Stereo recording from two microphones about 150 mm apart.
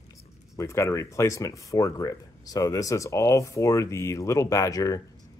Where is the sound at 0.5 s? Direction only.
20° left (ahead or behind).